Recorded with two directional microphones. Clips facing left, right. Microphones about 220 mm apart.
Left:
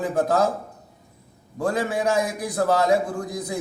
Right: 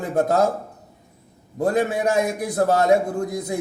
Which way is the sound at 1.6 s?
20° right (ahead or behind).